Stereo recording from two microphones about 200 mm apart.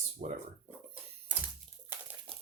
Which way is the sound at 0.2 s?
30° right (ahead or behind).